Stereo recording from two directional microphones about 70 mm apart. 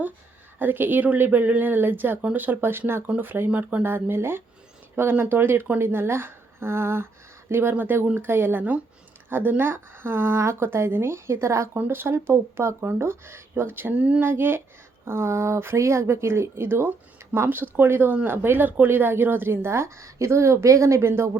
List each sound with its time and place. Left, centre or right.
0.6 s speech: right
3.8 s speech: right
11.7 s speech: right
13.9 s speech: centre
14.2 s speech: right